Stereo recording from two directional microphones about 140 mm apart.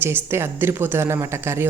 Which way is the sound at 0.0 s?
15° right (ahead or behind).